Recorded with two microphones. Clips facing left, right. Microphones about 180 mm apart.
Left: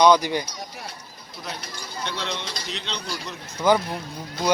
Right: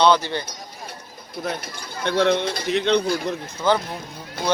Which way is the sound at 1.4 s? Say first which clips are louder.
Right 7 dB; 55° right (ahead or behind).